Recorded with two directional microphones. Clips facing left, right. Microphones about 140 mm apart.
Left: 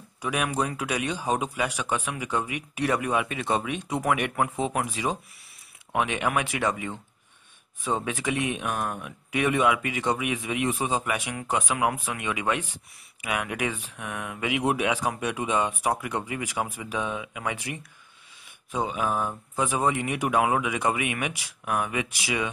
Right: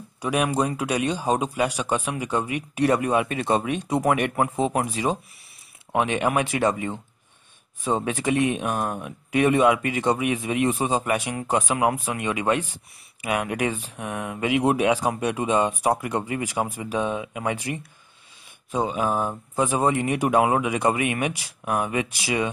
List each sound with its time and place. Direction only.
0.2 s speech: 35° right (ahead or behind)